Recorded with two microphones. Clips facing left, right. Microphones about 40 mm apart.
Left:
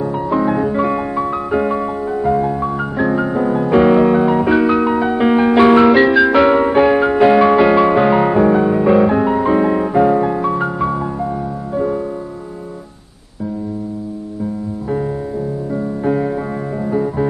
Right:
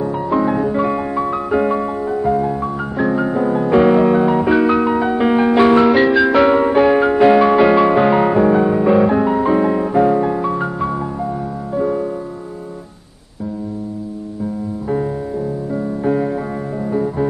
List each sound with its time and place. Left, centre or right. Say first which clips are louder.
0.0 s music: even; centre
15.7 s music: even; centre